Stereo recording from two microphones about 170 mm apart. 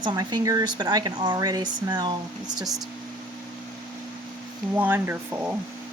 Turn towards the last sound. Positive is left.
turn(degrees=-10)  # may be behind; listen again after turning